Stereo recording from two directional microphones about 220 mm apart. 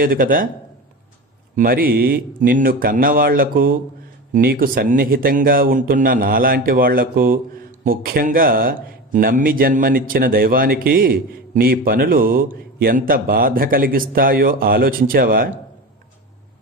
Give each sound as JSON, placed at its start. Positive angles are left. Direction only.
{"t": 0.0, "sound": "speech", "side_deg": -40}
{"t": 1.5, "sound": "speech", "side_deg": -40}